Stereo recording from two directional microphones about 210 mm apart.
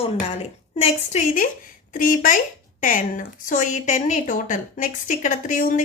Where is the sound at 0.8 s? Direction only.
35° left (ahead or behind).